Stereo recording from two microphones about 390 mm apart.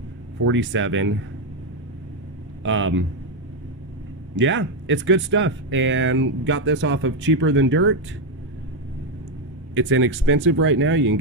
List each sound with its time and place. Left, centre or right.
0.4 s speech: right
2.6 s speech: right
4.4 s speech: right
9.8 s speech: right